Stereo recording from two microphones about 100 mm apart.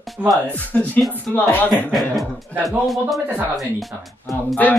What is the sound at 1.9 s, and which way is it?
Speech, centre (ahead or behind).